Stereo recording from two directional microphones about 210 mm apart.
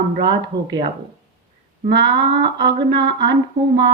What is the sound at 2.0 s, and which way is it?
Music, 55° right (ahead or behind).